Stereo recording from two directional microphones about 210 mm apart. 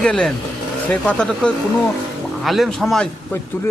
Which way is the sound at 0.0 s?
5° left (ahead or behind).